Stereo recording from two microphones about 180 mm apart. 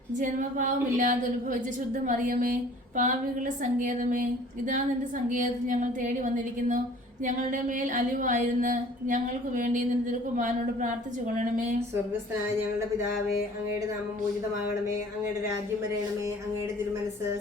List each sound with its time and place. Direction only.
0.2 s a woman's voice: 45° right (ahead or behind)